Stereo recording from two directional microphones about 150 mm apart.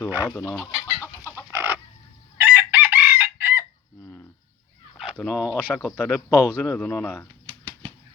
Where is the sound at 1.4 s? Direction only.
15° right (ahead or behind).